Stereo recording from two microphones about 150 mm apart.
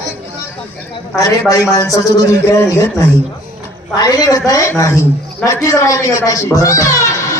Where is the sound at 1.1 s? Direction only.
25° left (ahead or behind).